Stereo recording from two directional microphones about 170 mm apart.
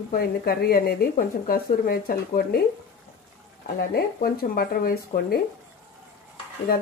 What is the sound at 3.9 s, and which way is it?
A woman's voice, 65° left (ahead or behind).